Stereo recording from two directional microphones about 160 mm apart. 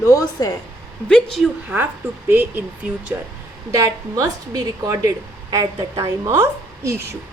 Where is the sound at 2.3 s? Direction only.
15° right (ahead or behind).